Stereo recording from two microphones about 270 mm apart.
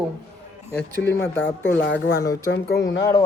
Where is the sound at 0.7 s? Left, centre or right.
Centre.